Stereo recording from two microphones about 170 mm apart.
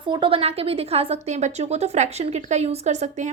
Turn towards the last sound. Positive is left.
turn(degrees=-45)  # may be behind; listen again after turning